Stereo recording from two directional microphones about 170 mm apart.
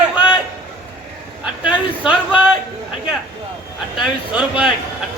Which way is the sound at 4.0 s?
5° right (ahead or behind).